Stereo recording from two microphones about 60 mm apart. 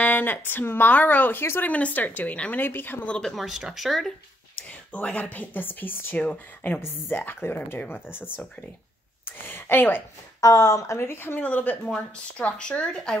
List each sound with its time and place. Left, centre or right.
0.0 s speech: left
2.5 s speech: left
3.1 s speech: centre
3.3 s speech: centre
4.6 s speech: left
10.4 s speech: left
11.0 s speech: left
11.4 s speech: left